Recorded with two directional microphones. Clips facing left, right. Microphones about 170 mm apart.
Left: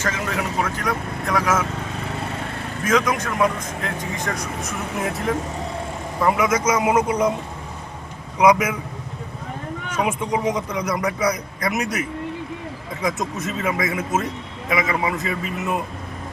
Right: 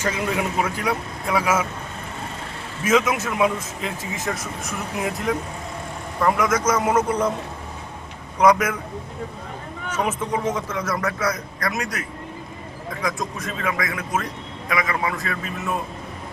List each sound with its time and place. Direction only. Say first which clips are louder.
0.0 s speech: right 1 dB; 15° right (ahead or behind)
2.8 s speech: right 1 dB; 5° right (ahead or behind); by 7.3 s 10° left (ahead or behind)
8.4 s speech: left 1 dB; 10° left (ahead or behind)
9.9 s speech: left 1 dB; 10° left (ahead or behind)